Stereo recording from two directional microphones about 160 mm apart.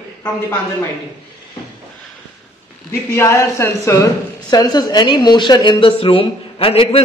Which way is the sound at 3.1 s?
15° left (ahead or behind).